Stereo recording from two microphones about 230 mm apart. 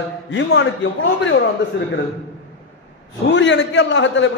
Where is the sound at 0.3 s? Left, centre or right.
Left.